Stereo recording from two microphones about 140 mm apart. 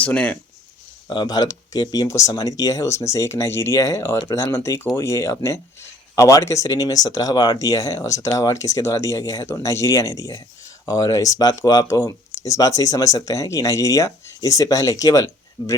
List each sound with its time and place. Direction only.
0.0 s speech: 10° left (ahead or behind)
1.1 s speech: 30° left (ahead or behind)